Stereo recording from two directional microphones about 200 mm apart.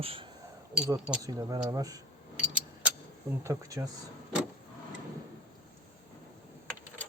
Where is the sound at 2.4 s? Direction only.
5° right (ahead or behind).